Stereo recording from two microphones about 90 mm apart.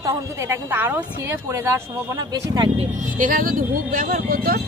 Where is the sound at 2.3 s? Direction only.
45° right (ahead or behind).